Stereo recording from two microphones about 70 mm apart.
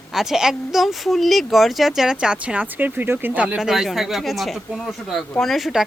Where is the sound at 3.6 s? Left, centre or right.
Centre.